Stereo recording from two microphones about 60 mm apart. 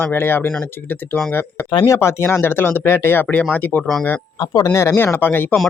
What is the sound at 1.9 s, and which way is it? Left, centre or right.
Speech, left.